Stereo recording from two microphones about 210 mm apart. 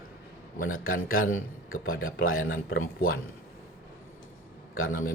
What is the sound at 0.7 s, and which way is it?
A man's voice, 75° left (ahead or behind).